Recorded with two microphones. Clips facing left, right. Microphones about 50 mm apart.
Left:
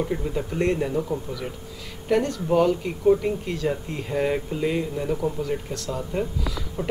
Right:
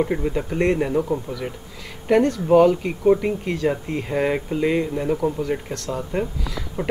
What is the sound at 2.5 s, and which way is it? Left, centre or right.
Speech, centre.